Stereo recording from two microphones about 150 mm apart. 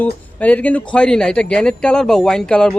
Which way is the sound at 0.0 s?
10° left (ahead or behind).